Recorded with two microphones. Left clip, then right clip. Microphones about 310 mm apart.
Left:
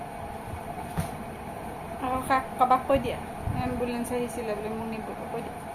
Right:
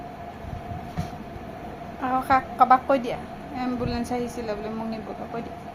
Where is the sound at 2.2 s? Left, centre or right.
Centre.